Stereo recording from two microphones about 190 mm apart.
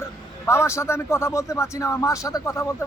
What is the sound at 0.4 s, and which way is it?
Speech, 15° left (ahead or behind).